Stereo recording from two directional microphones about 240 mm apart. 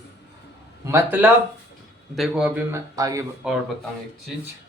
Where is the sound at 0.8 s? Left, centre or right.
Centre.